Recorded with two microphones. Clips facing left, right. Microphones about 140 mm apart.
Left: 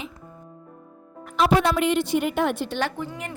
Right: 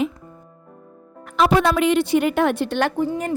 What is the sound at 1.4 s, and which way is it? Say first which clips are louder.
A woman's voice: right 3 dB; 85° right.